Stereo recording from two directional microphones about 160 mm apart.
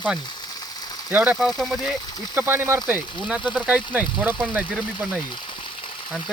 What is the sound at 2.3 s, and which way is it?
Speech, 15° right (ahead or behind).